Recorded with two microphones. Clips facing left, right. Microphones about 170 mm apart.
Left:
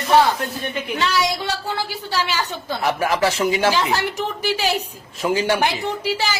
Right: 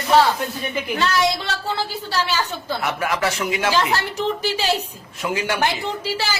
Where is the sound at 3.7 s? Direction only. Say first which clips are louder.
Even; 15° left (ahead or behind).